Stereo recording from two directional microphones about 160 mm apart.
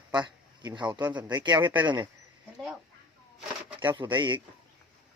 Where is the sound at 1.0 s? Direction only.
10° right (ahead or behind).